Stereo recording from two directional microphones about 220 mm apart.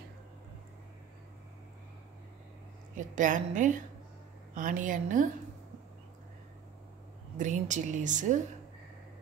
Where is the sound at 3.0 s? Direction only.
35° right (ahead or behind).